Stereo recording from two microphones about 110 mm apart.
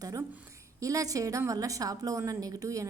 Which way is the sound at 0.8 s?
30° right (ahead or behind).